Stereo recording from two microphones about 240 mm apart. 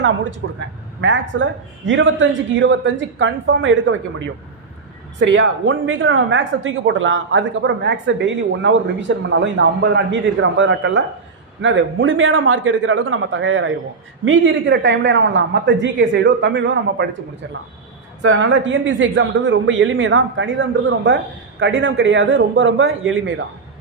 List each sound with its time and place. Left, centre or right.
0.4 s speech: right
5.2 s speech: right
18.2 s speech: right